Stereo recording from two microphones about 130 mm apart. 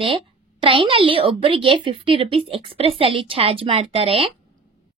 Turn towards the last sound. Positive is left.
turn(degrees=-45)  # may be behind; listen again after turning